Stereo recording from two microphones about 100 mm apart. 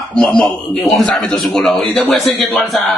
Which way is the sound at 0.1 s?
10° left (ahead or behind).